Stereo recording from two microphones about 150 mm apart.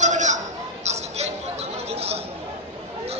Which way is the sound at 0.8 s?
45° right (ahead or behind).